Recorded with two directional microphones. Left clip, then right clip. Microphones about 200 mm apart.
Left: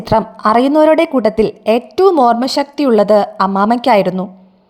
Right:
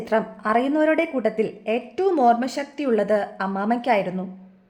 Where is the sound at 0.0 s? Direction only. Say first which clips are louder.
Left 10 dB; 35° left (ahead or behind).